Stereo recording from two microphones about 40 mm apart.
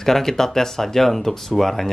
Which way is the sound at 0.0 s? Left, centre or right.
Centre.